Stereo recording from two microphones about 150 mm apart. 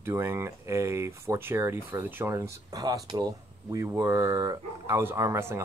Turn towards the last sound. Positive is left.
turn(degrees=-15)  # may be behind; listen again after turning